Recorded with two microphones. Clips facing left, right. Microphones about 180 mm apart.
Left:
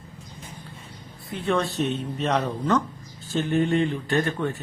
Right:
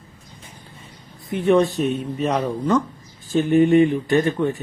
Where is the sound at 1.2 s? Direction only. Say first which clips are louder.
Right 8 dB; 15° right (ahead or behind).